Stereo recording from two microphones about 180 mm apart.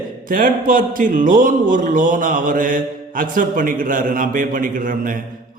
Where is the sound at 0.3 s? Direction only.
50° right (ahead or behind).